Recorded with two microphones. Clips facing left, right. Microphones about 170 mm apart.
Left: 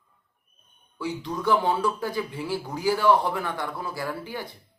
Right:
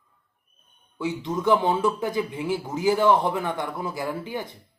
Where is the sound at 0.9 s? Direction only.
20° right (ahead or behind).